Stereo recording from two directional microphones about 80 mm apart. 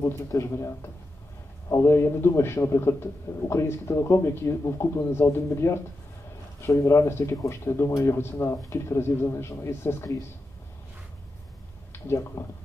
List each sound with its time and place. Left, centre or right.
0.0 s a man's voice: left
11.9 s speech: left